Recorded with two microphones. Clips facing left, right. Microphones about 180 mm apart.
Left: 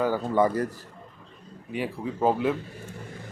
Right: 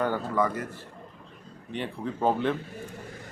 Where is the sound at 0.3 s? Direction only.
30° left (ahead or behind).